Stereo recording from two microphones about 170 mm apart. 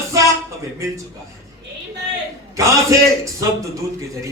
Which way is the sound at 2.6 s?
20° right (ahead or behind).